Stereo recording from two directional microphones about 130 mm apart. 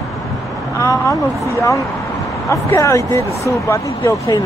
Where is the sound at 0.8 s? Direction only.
25° left (ahead or behind).